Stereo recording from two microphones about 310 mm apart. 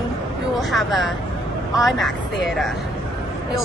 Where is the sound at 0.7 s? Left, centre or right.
Centre.